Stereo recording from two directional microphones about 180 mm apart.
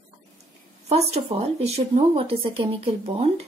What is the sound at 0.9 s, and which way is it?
A woman's voice, 35° right (ahead or behind).